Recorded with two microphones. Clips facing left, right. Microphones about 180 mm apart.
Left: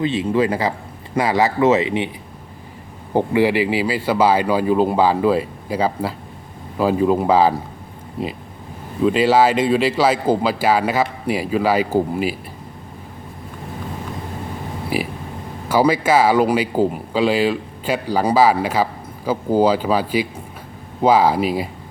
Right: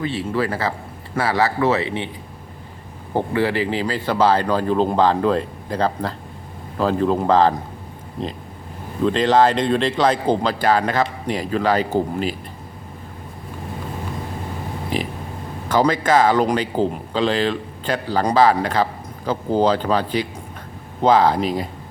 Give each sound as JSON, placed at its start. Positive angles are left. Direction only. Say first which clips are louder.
{"t": 0.0, "sound": "speech", "louder": "left 4 dB", "side_deg": 20}
{"t": 3.1, "sound": "speech", "louder": "left 4 dB", "side_deg": 15}
{"t": 9.0, "sound": "speech", "louder": "left 1 dB", "side_deg": 5}
{"t": 14.9, "sound": "a sound", "louder": "left 2 dB", "side_deg": 10}
{"t": 15.7, "sound": "speech", "louder": "left 1 dB", "side_deg": 10}